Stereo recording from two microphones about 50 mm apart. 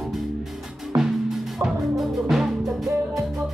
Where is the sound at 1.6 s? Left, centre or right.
Centre.